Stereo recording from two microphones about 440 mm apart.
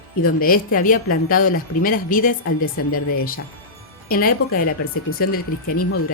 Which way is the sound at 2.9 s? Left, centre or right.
Left.